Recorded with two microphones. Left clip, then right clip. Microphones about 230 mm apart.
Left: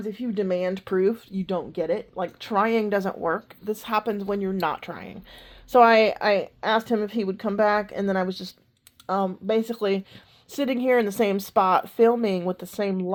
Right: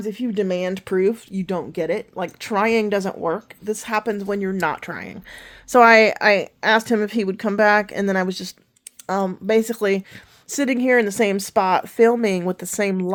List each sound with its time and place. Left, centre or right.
0.0 s speech: right